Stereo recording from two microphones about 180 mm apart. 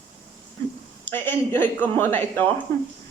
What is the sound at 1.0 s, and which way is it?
A woman's voice, 10° left (ahead or behind).